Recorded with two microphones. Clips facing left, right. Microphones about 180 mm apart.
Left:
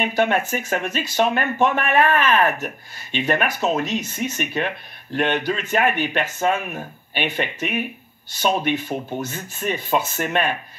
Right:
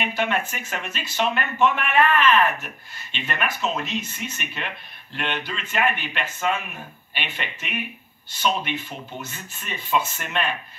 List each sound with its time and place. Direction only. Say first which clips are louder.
0.0 s speech: left 5 dB; 45° left (ahead or behind)